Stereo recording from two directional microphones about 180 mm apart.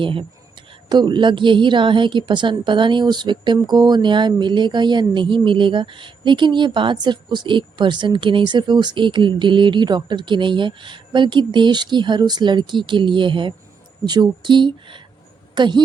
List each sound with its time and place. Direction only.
0.0 s a woman's voice: 30° right (ahead or behind)